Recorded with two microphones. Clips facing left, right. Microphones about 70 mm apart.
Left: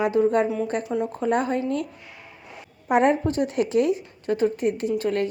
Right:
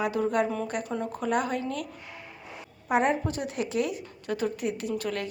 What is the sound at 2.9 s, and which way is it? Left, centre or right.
Speech, left.